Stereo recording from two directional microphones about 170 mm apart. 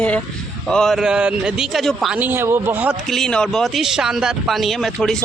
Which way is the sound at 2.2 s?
15° right (ahead or behind).